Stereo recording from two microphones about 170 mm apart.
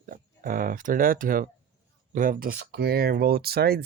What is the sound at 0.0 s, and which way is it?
Speech, 55° right (ahead or behind).